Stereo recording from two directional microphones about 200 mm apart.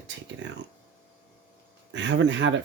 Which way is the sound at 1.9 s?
65° right (ahead or behind).